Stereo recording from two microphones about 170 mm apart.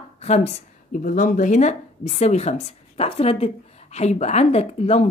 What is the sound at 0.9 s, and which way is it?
A woman's voice, 50° left (ahead or behind).